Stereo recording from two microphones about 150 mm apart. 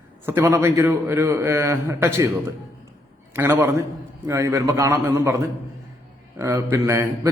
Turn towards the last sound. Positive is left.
turn(degrees=-20)  # may be behind; listen again after turning